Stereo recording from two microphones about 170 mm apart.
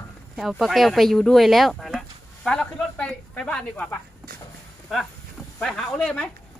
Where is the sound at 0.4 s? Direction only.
Centre (ahead or behind).